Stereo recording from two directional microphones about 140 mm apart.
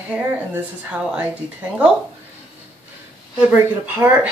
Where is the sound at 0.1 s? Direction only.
10° right (ahead or behind).